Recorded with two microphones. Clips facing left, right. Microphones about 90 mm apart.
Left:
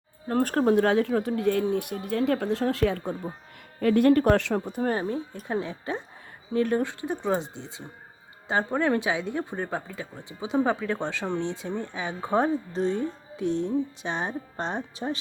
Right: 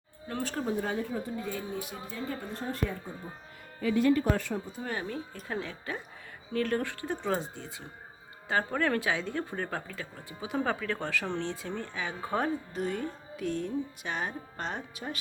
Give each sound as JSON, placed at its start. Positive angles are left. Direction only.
{"t": 0.3, "sound": "speech", "side_deg": 45}
{"t": 3.8, "sound": "speech", "side_deg": 60}
{"t": 4.8, "sound": "speech", "side_deg": 35}